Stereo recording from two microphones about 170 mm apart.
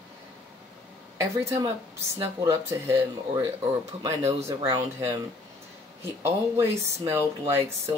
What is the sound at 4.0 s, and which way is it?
Speech, 40° right (ahead or behind).